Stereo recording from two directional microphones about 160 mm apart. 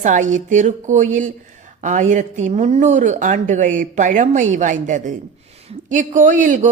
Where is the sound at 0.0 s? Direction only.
50° right (ahead or behind).